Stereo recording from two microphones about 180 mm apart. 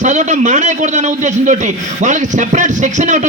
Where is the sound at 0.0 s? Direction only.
40° right (ahead or behind).